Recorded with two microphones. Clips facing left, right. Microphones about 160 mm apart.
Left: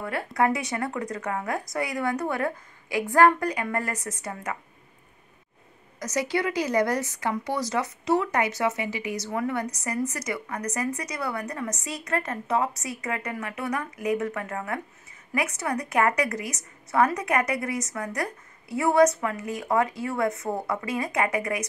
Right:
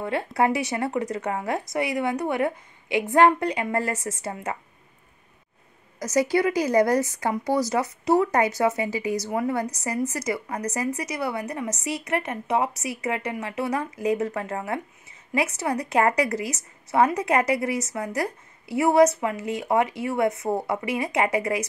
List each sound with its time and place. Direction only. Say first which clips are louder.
0.0 s a woman's voice: right 2 dB; 25° right (ahead or behind)
5.9 s a woman's voice: right 5 dB; 30° right (ahead or behind)